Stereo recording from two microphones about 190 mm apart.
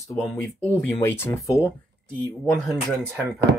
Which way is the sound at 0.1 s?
10° left (ahead or behind).